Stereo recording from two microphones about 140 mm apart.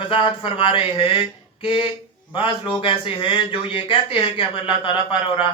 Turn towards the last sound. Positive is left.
turn(degrees=40)  # may be behind; listen again after turning